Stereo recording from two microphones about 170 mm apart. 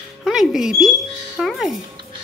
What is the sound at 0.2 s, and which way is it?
Speech, centre (ahead or behind).